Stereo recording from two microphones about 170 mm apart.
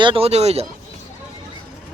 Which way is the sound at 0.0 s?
35° right (ahead or behind).